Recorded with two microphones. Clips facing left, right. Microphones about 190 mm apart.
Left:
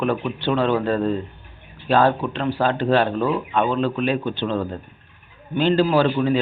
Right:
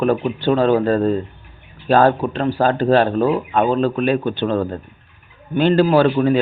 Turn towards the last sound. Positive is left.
turn(degrees=-55)  # may be behind; listen again after turning